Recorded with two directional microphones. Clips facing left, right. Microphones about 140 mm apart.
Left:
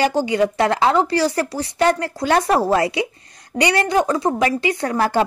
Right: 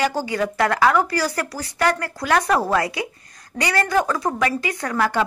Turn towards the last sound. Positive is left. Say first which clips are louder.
# left 3 dB
turn(degrees=30)  # may be behind; listen again after turning